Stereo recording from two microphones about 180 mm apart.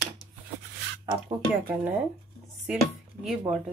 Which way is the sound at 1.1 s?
15° right (ahead or behind).